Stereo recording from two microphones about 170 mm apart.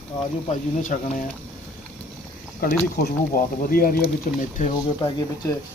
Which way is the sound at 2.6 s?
60° left (ahead or behind).